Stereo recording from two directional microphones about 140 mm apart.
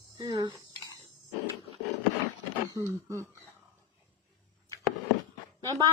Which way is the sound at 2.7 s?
20° right (ahead or behind).